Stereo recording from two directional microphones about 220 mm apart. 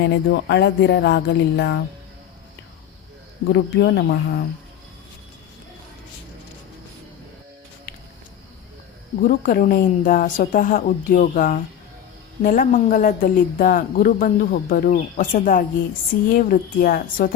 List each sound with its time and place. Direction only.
0.0 s speech: 50° left (ahead or behind)
3.5 s speech: 50° left (ahead or behind)
9.2 s speech: 40° left (ahead or behind)